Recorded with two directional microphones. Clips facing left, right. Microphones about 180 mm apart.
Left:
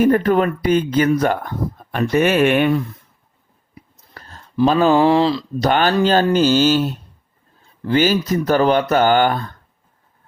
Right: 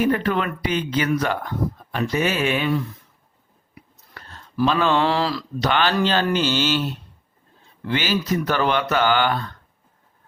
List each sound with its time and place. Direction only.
0.0 s speech: 45° left (ahead or behind)
3.8 s chewing: 40° left (ahead or behind)
4.6 s speech: 40° left (ahead or behind)
5.5 s speech: 45° left (ahead or behind)